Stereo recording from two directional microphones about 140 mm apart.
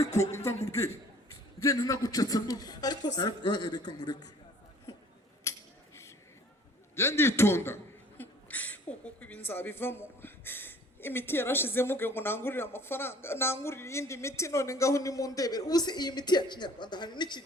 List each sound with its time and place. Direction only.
0.2 s speech: 20° left (ahead or behind)
5.5 s a sound: 20° left (ahead or behind)
6.9 s a woman's voice: 20° left (ahead or behind)